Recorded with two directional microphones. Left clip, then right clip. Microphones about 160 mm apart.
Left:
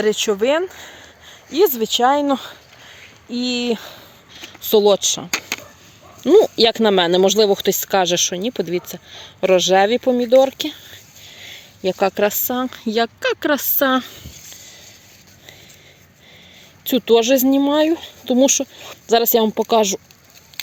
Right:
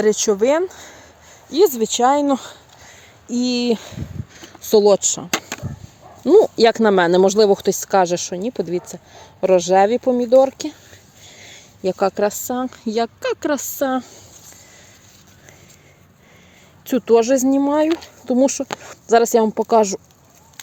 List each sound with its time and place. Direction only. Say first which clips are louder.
0.0 s speech: right 1 dB; 25° right (ahead or behind)
3.2 s speech: right 1 dB; 30° right (ahead or behind)
4.9 s speech: even; 10° right (ahead or behind); by 14.2 s 10° left (ahead or behind)
16.8 s speech: even; centre (ahead or behind)